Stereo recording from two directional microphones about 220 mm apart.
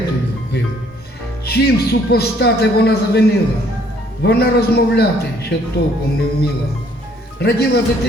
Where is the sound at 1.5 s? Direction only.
45° left (ahead or behind).